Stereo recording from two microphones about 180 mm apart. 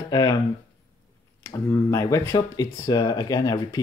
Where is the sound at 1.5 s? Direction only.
15° left (ahead or behind).